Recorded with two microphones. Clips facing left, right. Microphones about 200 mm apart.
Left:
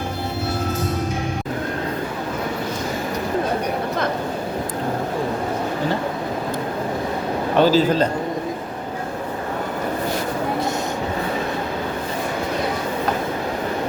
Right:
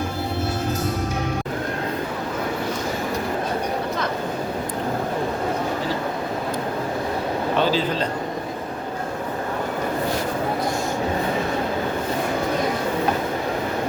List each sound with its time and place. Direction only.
7.6 s a man's voice: 40° left (ahead or behind)